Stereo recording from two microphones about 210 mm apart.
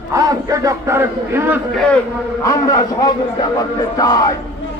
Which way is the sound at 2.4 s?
15° left (ahead or behind).